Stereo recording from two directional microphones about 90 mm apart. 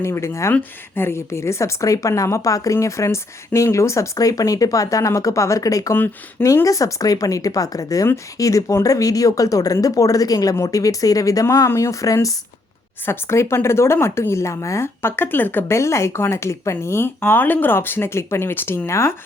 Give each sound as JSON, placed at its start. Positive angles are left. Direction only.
{"t": 0.0, "sound": "a woman's voice", "side_deg": 30}